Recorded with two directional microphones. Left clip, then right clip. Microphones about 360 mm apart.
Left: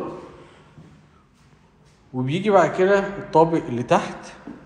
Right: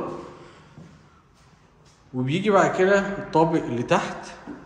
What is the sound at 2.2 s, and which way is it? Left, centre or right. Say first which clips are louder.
A man's voice: left 2 dB; centre.